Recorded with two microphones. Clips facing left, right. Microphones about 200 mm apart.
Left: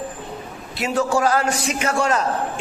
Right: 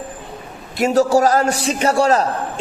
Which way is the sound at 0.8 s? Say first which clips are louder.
Right 6 dB; 40° right (ahead or behind).